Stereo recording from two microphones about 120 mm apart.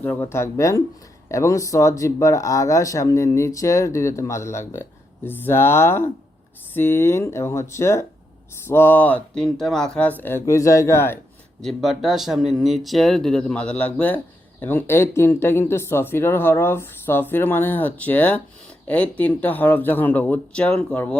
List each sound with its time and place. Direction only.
0.0 s speech: 15° left (ahead or behind)
11.6 s speech: centre (ahead or behind)